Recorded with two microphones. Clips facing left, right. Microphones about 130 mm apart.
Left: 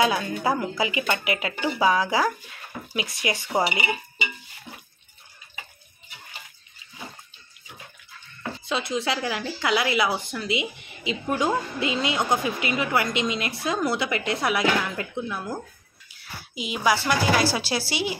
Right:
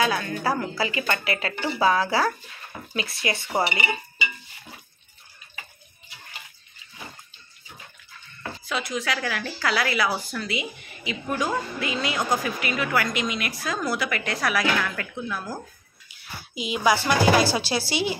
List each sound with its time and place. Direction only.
0.0 s a woman's voice: 20° left (ahead or behind)
8.6 s speech: 25° left (ahead or behind)
16.5 s a woman's voice: centre (ahead or behind)